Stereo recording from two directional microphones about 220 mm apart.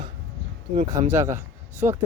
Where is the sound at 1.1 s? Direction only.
10° right (ahead or behind).